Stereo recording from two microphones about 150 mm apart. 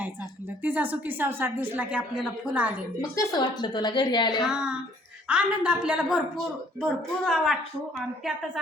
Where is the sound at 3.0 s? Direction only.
25° left (ahead or behind).